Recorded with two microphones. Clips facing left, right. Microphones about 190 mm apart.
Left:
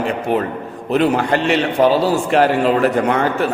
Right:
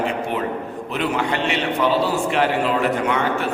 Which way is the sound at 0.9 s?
40° left (ahead or behind).